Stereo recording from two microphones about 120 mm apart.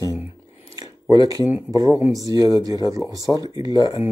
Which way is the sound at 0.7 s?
30° right (ahead or behind).